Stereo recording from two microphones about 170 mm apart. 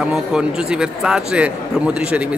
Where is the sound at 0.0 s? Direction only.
5° right (ahead or behind).